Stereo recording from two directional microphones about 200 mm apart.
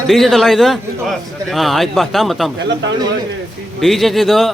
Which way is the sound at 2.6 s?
60° right (ahead or behind).